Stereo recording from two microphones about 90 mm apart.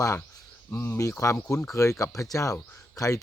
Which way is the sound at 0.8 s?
35° left (ahead or behind).